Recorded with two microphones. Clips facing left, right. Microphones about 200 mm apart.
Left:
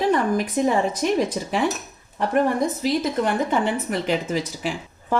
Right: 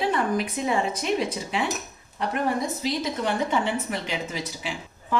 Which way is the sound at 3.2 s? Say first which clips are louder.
Even; 50° left (ahead or behind).